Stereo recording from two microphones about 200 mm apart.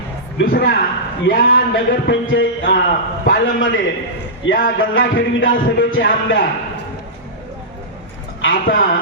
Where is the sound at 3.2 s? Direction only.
70° left (ahead or behind).